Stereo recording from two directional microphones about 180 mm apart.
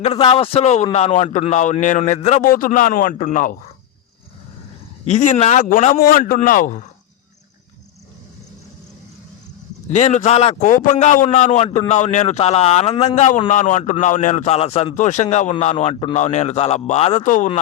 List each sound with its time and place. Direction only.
0.0 s speech: 30° left (ahead or behind)
2.4 s a man's voice: 50° left (ahead or behind)
5.0 s a man's voice: 40° left (ahead or behind)
9.9 s speech: 40° left (ahead or behind)